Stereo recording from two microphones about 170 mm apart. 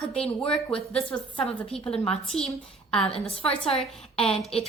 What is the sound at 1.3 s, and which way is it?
Speech, 30° left (ahead or behind).